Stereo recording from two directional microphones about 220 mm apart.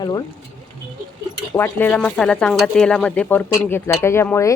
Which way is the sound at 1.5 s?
10° left (ahead or behind).